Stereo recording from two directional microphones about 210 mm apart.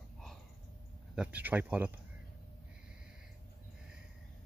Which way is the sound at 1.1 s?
5° right (ahead or behind).